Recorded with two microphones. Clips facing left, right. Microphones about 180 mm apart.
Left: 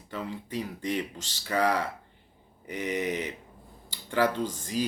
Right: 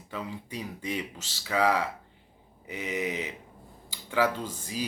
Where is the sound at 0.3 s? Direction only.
10° right (ahead or behind).